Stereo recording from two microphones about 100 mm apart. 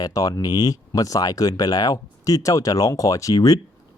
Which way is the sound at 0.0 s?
40° left (ahead or behind).